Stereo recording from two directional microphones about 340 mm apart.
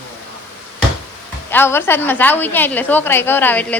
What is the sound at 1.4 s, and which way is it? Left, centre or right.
A woman's voice, centre.